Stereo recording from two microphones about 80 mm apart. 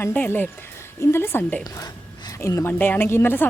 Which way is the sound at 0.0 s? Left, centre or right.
Left.